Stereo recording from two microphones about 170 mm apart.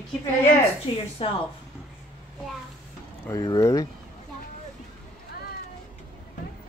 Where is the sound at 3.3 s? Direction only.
20° left (ahead or behind).